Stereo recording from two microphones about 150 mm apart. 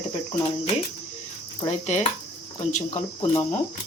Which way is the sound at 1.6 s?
50° left (ahead or behind).